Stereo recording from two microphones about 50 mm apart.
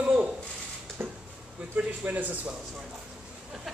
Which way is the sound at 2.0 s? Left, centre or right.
Right.